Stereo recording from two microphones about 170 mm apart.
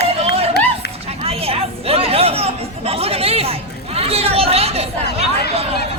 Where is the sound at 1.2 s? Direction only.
35° right (ahead or behind).